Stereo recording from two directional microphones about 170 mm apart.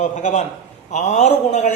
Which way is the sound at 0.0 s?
45° left (ahead or behind).